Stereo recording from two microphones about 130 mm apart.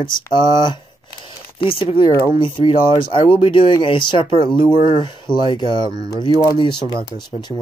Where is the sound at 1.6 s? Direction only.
45° left (ahead or behind).